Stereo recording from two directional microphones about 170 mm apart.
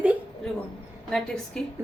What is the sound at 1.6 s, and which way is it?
Speech, 5° left (ahead or behind).